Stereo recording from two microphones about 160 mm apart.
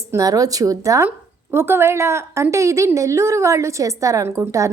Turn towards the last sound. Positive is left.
turn(degrees=-20)  # may be behind; listen again after turning